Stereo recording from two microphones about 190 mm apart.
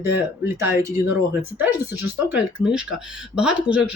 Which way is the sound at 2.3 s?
5° right (ahead or behind).